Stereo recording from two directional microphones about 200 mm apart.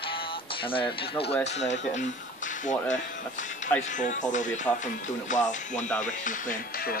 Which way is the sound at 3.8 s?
40° left (ahead or behind).